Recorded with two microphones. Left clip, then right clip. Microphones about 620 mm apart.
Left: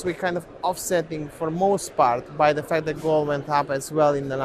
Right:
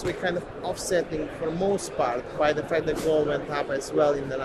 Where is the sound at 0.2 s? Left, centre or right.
Left.